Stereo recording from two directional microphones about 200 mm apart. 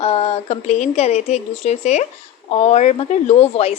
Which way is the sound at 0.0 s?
30° left (ahead or behind).